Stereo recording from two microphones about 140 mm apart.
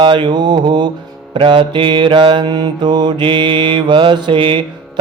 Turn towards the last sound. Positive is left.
turn(degrees=-35)  # may be behind; listen again after turning